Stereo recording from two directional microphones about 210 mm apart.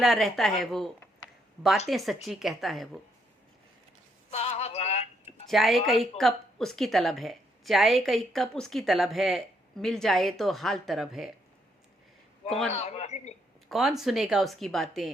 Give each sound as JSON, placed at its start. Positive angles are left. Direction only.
{"t": 0.0, "sound": "speech", "side_deg": 0}
{"t": 4.3, "sound": "synthetic singing", "side_deg": 30}
{"t": 5.5, "sound": "speech", "side_deg": 0}
{"t": 12.5, "sound": "speech", "side_deg": 0}
{"t": 12.7, "sound": "a man's voice", "side_deg": 30}
{"t": 13.7, "sound": "speech", "side_deg": 0}